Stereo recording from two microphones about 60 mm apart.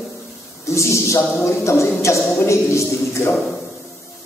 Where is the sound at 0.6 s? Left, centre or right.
Left.